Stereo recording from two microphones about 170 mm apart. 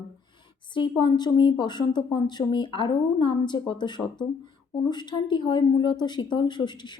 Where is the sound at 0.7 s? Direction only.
30° left (ahead or behind).